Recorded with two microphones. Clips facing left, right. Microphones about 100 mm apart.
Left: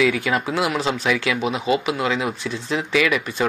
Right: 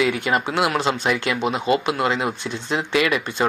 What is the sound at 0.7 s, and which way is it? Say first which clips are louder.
Speech: right 1 dB; centre (ahead or behind).